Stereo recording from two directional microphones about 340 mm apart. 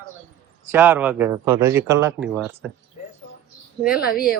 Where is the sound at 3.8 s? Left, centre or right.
Centre.